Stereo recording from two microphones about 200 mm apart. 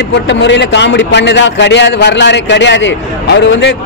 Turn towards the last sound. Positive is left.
turn(degrees=60)  # may be behind; listen again after turning